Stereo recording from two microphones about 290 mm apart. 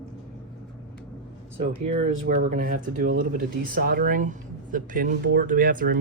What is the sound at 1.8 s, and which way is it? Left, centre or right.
Speech, right.